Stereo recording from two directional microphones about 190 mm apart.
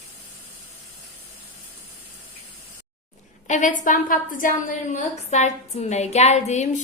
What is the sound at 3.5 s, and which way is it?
A woman's voice, 40° left (ahead or behind).